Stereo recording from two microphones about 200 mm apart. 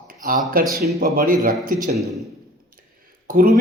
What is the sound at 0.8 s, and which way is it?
Speech, 50° right (ahead or behind).